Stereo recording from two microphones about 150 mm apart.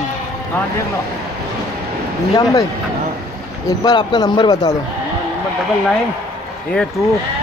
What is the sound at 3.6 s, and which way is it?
Speech, 30° left (ahead or behind).